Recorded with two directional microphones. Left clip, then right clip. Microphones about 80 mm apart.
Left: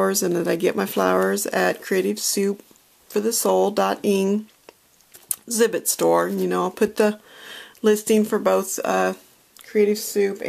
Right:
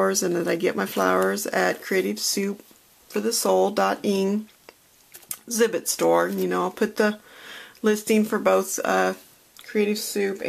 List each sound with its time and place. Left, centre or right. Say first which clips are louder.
0.0 s speech: left 1 dB; left